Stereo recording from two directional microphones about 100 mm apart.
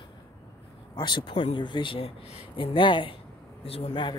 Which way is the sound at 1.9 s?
80° left.